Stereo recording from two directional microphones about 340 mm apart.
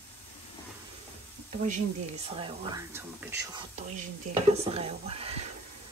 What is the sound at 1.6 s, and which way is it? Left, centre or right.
Speech, right.